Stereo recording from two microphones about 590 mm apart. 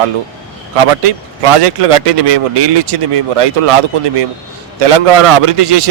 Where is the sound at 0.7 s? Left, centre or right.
Right.